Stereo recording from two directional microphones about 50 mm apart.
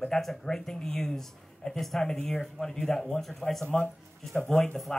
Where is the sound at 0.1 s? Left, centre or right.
Centre.